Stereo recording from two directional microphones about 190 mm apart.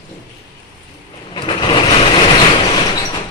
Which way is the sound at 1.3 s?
25° left (ahead or behind).